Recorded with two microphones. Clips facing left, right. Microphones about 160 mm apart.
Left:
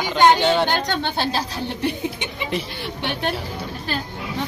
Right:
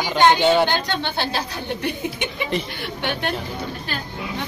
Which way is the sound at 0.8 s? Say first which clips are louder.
Left 1 dB; 40° left (ahead or behind).